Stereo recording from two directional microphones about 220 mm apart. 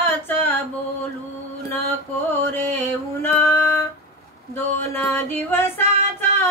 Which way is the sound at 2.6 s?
10° left (ahead or behind).